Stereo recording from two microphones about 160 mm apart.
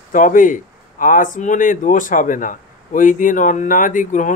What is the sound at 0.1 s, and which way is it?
Speech, 55° left (ahead or behind).